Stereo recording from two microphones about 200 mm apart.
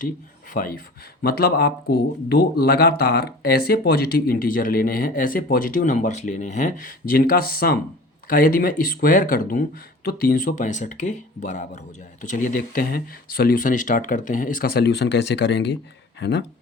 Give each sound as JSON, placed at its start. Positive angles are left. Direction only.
{"t": 0.5, "sound": "speech", "side_deg": 45}